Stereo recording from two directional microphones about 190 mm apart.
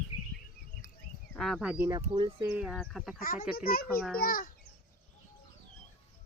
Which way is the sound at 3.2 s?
50° left (ahead or behind).